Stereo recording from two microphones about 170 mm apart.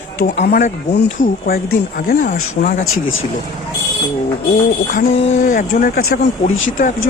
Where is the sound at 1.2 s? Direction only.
60° left (ahead or behind).